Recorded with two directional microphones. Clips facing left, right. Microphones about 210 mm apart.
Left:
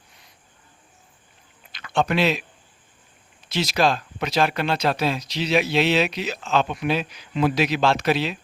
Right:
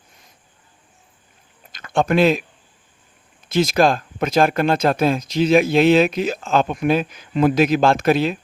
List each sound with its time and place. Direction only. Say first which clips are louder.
1.7 s speech: right 4 dB; 45° right (ahead or behind)
3.5 s speech: right 5 dB; 50° right (ahead or behind)